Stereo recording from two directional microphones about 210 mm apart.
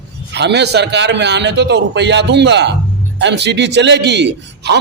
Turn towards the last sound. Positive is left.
turn(degrees=-55)  # may be behind; listen again after turning